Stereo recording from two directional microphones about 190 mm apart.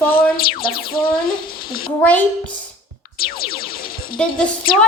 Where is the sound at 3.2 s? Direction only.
50° left (ahead or behind).